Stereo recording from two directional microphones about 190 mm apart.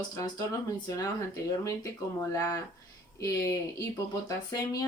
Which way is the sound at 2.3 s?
15° left (ahead or behind).